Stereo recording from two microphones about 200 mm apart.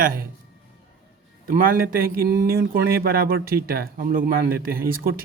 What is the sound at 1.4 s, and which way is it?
Speech, 45° right (ahead or behind).